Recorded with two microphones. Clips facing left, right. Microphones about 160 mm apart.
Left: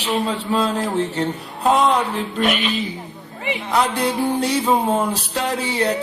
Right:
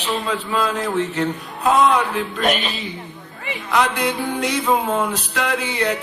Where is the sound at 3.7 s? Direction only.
35° left (ahead or behind).